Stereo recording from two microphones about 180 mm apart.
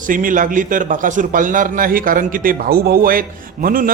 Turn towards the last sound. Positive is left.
turn(degrees=-50)  # may be behind; listen again after turning